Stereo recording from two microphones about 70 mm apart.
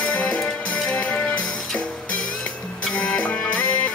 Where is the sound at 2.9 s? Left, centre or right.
Centre.